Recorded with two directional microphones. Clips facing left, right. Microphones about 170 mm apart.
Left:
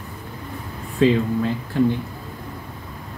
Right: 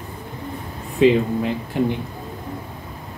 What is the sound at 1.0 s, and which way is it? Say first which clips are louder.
Speech: right 2 dB; 15° right (ahead or behind).